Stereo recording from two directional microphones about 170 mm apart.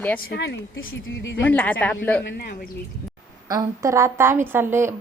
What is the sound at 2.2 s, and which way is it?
Speech, 70° left (ahead or behind).